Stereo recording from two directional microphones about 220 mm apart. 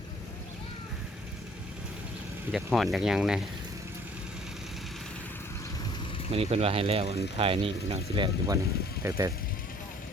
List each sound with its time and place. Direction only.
2.5 s speech: centre (ahead or behind)
6.3 s speech: 25° right (ahead or behind)